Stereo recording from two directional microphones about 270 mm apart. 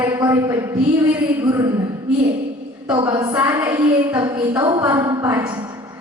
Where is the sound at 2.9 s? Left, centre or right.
Centre.